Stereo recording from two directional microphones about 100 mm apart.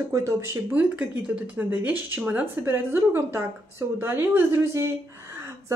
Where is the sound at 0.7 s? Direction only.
15° right (ahead or behind).